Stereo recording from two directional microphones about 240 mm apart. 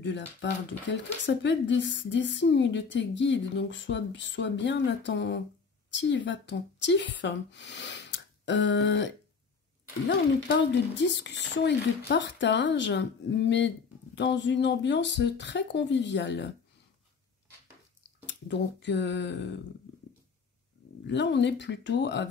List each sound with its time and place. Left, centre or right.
0.0 s speech: left
18.2 s speech: left
21.1 s speech: left